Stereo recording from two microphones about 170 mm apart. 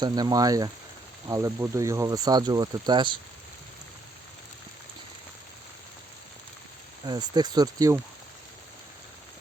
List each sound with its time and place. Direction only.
0.0 s speech: 25° right (ahead or behind)
7.0 s speech: 25° right (ahead or behind)